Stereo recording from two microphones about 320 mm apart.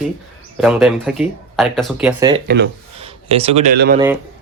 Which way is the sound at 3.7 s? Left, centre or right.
Right.